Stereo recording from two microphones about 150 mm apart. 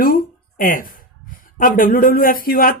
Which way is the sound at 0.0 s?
75° left (ahead or behind).